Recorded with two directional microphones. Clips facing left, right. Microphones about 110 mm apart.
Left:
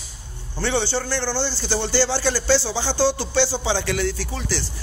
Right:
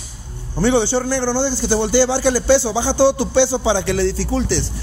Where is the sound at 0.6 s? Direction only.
15° right (ahead or behind).